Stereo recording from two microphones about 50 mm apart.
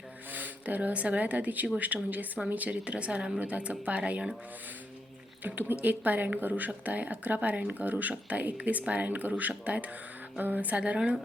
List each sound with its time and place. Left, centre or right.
0.3 s a woman's voice: right
5.4 s a woman's voice: right